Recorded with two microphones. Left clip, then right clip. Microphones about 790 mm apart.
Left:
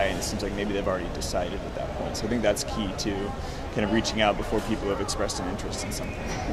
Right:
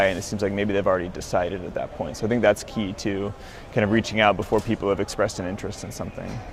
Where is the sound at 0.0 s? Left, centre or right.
Right.